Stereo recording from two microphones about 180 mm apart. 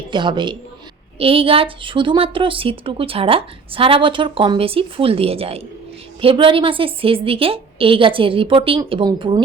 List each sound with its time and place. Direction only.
0.1 s a woman's voice: 25° right (ahead or behind)